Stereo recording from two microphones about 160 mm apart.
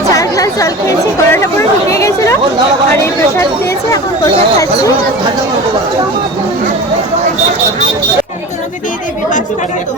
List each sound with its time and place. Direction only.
0.1 s chatter: 20° left (ahead or behind)
2.9 s speech: 15° left (ahead or behind)
4.5 s speech: 20° left (ahead or behind)